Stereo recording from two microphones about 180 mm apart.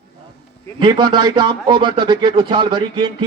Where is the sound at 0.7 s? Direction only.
25° right (ahead or behind).